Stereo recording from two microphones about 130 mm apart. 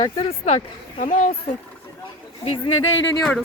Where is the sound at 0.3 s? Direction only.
60° left (ahead or behind); by 1.3 s 85° left.